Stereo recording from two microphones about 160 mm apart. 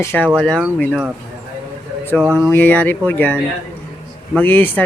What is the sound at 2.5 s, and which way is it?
Speech, 10° left (ahead or behind).